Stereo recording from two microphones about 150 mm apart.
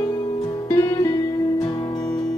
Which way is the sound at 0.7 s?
20° left (ahead or behind).